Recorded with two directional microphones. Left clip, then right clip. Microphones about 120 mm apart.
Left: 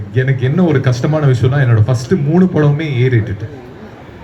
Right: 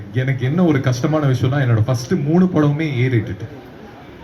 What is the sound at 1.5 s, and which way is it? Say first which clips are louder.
Speech: left 3 dB; 20° right (ahead or behind).